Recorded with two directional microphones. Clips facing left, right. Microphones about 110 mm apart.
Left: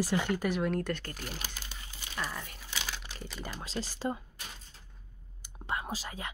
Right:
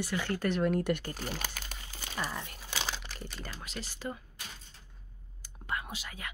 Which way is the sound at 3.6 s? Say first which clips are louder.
Left 6 dB; 35° left (ahead or behind).